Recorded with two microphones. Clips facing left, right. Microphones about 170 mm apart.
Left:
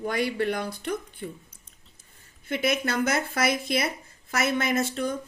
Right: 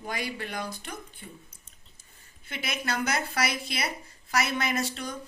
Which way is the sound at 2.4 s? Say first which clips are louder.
Left 7 dB; 55° left (ahead or behind).